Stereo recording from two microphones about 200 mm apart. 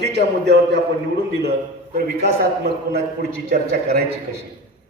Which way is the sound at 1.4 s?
55° right (ahead or behind).